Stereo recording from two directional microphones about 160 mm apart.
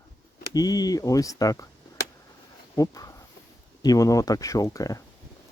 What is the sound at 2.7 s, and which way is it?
Speech, 20° left (ahead or behind).